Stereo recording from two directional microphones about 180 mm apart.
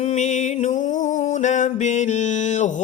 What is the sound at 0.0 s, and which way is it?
Music, 40° left (ahead or behind).